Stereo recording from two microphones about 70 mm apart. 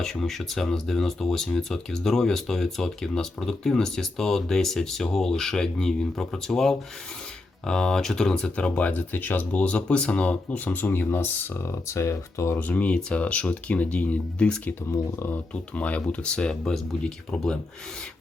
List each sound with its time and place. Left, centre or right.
0.0 s speech: centre; by 12.5 s left
12.5 s speech: left
15.7 s speech: centre